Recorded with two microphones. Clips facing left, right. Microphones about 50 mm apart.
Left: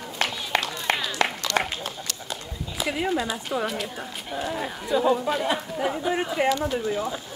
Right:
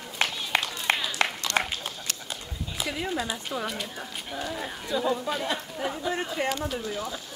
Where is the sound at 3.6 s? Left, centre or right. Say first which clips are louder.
Left 4 dB; centre.